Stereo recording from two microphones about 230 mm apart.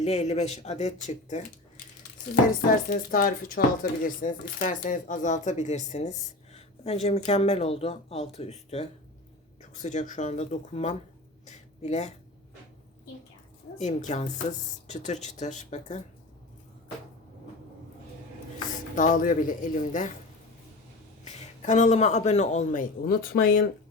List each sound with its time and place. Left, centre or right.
0.0 s a man's voice: left
2.6 s a man's voice: left
11.4 s a sound: left
13.7 s a man's voice: left
18.9 s a man's voice: left
21.2 s a man's voice: left